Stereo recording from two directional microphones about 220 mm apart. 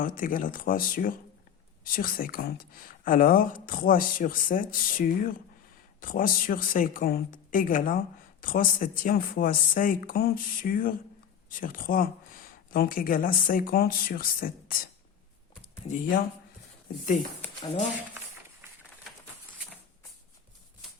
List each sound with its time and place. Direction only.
0.0 s speech: 40° left (ahead or behind)